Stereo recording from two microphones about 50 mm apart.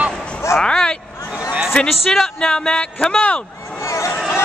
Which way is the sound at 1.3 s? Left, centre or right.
Centre.